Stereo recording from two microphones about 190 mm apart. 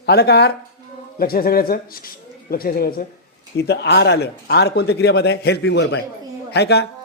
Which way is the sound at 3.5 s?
65° left (ahead or behind).